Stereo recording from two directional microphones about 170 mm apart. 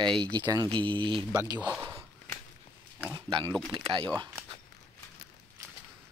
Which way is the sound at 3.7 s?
30° right (ahead or behind).